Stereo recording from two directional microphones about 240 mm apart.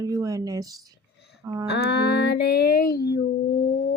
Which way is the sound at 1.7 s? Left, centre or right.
Left.